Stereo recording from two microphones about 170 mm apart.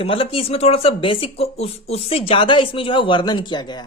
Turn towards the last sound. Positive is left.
turn(degrees=25)  # may be behind; listen again after turning